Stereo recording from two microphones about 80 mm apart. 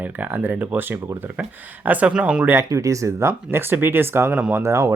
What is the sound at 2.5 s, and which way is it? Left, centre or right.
Speech, right.